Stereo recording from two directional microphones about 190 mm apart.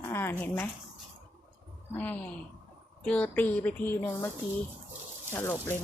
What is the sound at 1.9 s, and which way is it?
Speech, 10° left (ahead or behind).